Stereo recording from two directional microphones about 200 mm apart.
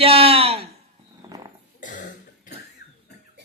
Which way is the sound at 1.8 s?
40° left (ahead or behind).